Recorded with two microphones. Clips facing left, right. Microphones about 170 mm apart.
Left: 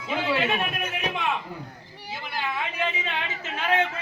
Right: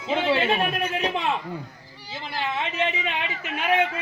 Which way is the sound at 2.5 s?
25° right (ahead or behind).